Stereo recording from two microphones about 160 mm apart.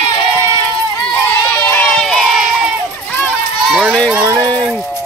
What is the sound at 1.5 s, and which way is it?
Crowd, 10° left (ahead or behind).